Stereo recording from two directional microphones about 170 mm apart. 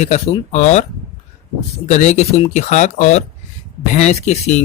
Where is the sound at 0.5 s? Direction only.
40° left (ahead or behind).